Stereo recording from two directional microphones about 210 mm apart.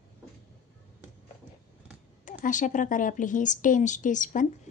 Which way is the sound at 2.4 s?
40° left (ahead or behind).